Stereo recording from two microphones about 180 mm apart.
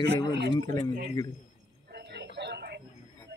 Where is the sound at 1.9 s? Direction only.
70° right (ahead or behind).